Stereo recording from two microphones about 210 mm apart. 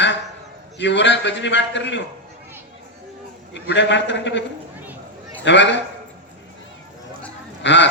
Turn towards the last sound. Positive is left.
turn(degrees=60)  # may be behind; listen again after turning